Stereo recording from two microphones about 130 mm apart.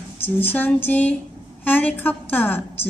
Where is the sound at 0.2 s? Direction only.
15° left (ahead or behind).